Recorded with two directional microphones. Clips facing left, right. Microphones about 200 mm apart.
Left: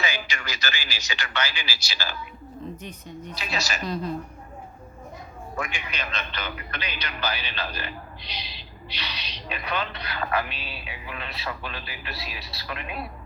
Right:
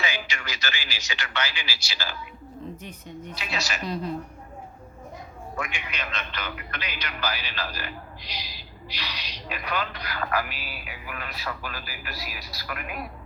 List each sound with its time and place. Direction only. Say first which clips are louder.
0.0 s speech: left 1 dB; 40° left (ahead or behind)
3.3 s a woman's voice: left 2 dB; 40° left (ahead or behind)
5.5 s a man's voice: left 1 dB; 35° left (ahead or behind)